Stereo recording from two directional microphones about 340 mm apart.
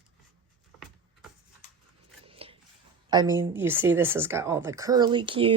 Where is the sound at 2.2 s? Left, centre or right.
Centre.